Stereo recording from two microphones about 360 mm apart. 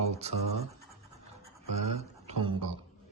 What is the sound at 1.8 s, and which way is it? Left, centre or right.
Speech, centre.